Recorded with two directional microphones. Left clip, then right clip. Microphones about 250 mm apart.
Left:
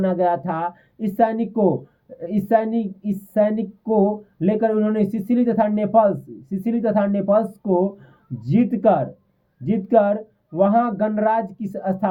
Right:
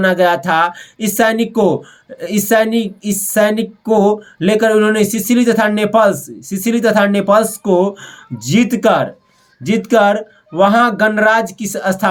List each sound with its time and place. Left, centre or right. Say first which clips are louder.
0.0 s speech: right 8 dB; centre
7.6 s speech: right 7 dB; right
8.4 s speech: right 6 dB; centre